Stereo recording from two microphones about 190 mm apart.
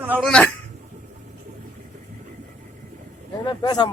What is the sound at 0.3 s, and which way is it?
Speech, 5° left (ahead or behind).